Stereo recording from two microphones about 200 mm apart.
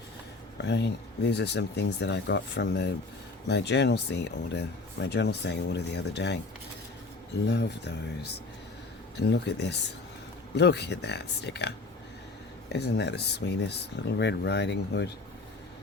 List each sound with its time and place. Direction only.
0.6 s speech: 60° left (ahead or behind)
7.4 s speech: 55° left (ahead or behind)
9.1 s speech: 60° left (ahead or behind)